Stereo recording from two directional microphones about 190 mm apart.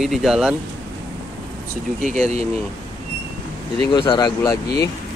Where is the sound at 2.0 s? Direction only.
35° right (ahead or behind).